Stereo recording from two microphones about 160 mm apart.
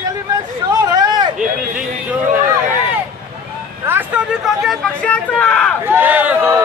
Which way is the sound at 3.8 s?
10° right (ahead or behind).